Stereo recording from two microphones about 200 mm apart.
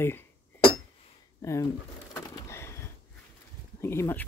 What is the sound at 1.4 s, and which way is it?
Speech, 15° left (ahead or behind).